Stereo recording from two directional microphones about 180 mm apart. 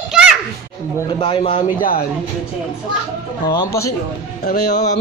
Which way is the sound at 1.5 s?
50° left (ahead or behind).